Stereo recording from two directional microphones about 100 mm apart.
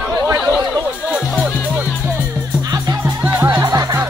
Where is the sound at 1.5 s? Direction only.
15° left (ahead or behind).